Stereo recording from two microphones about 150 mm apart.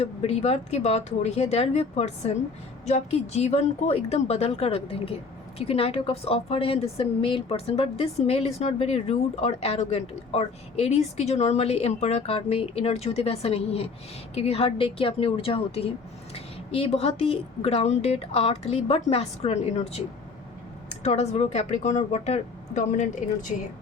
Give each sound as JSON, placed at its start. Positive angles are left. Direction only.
{"t": 0.0, "sound": "a woman's voice", "side_deg": 45}
{"t": 21.0, "sound": "a woman's voice", "side_deg": 45}